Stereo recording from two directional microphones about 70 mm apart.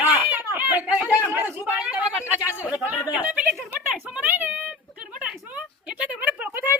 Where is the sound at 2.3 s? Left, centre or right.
Right.